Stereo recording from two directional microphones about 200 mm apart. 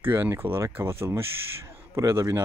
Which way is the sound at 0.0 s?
10° right (ahead or behind).